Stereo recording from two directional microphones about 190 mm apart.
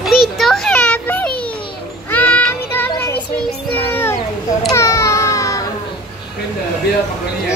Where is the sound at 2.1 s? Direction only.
10° left (ahead or behind).